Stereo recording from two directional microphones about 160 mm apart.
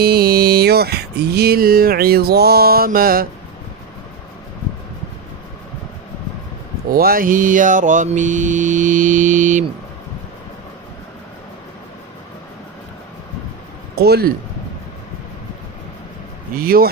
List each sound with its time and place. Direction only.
0.0 s mantra: 75° right (ahead or behind)
6.9 s mantra: 65° right (ahead or behind)
13.9 s speech: 80° right
16.6 s mantra: 65° right (ahead or behind)